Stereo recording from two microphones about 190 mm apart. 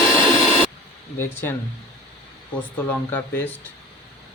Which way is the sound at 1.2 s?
10° left (ahead or behind).